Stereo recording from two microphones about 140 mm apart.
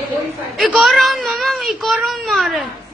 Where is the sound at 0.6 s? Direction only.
Centre (ahead or behind).